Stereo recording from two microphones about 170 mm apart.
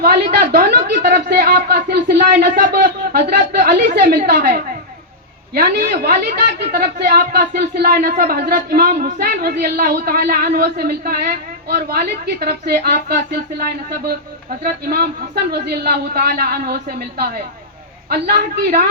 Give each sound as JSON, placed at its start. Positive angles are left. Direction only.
{"t": 0.3, "sound": "a woman's voice", "side_deg": -65}
{"t": 18.1, "sound": "a woman's voice", "side_deg": -65}